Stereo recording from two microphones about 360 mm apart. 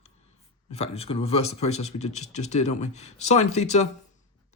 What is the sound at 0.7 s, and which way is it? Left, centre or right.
Speech, centre.